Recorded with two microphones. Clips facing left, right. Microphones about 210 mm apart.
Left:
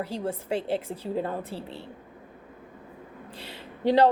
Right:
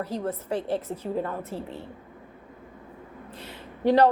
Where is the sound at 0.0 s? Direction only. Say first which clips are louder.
Right 1 dB; 30° left (ahead or behind).